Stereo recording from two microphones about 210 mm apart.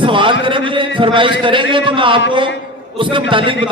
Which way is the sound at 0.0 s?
25° right (ahead or behind).